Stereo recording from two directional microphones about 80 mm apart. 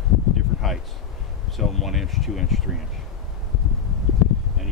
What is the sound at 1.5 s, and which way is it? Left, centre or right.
Speech, centre.